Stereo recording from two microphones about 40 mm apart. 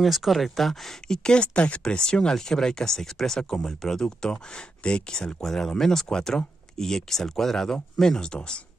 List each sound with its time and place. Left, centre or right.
0.0 s speech: centre
1.0 s speech: centre
4.3 s speech: left